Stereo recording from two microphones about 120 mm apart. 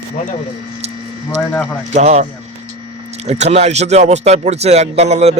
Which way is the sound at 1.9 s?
70° right (ahead or behind).